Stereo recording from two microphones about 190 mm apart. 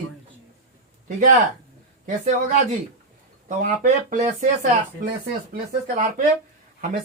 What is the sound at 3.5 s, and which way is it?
Speech, 40° right (ahead or behind).